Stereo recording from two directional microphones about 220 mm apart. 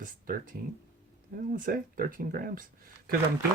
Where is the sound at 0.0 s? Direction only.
40° right (ahead or behind).